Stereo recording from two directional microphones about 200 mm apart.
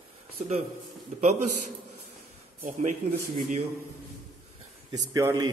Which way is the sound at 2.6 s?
40° right (ahead or behind).